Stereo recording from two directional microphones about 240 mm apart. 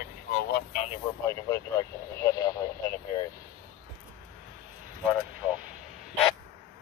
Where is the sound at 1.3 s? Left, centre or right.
Centre.